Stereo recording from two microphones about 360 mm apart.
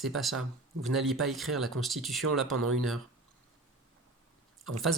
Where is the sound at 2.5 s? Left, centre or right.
Right.